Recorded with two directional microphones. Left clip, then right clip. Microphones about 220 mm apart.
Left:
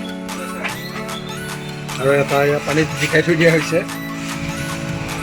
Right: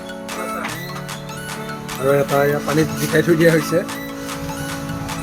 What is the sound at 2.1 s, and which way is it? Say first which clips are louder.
Speech: left 1 dB; 5° left (ahead or behind).